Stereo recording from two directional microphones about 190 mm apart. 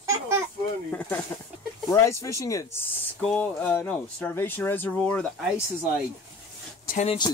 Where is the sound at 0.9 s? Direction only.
5° left (ahead or behind).